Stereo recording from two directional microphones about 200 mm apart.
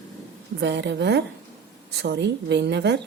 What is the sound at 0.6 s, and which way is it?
A woman's voice, 60° right (ahead or behind).